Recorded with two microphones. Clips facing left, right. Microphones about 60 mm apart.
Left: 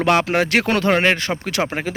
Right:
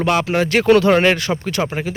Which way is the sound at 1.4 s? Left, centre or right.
Left.